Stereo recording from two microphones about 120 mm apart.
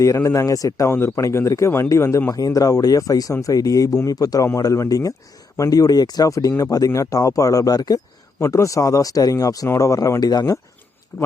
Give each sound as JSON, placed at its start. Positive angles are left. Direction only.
{"t": 0.0, "sound": "speech", "side_deg": 25}